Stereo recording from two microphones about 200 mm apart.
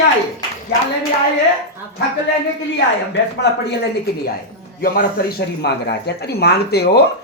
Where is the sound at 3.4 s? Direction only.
60° left (ahead or behind).